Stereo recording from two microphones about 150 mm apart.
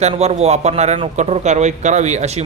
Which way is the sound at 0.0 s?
45° right (ahead or behind).